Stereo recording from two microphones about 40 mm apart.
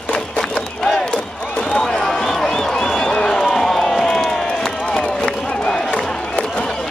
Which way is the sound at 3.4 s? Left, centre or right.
Centre.